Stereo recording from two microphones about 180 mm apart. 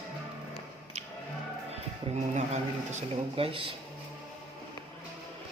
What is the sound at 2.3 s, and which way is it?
Speech, 40° right (ahead or behind).